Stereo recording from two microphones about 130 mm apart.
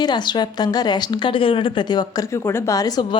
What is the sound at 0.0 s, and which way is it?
A woman's voice, 35° left (ahead or behind).